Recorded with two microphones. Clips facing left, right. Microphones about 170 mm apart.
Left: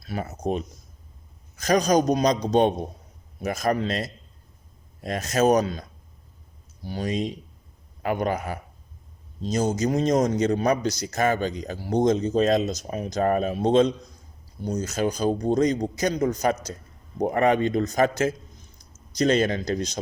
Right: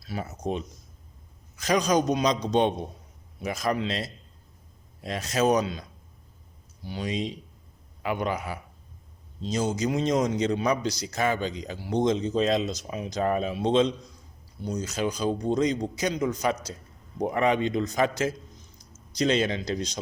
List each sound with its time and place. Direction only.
0.0 s a man's voice: 55° left (ahead or behind)
6.8 s a man's voice: 45° left (ahead or behind)